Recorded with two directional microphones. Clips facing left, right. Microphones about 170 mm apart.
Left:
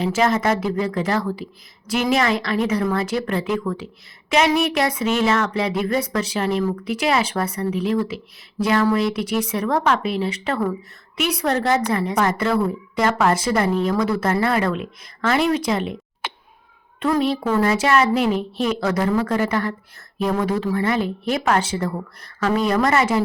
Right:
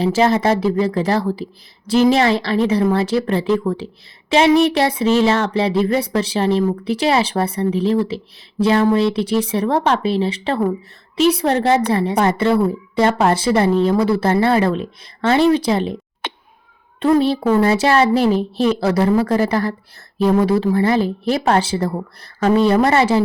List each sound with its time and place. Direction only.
0.0 s a woman's voice: 35° right (ahead or behind)
17.0 s speech: 30° right (ahead or behind)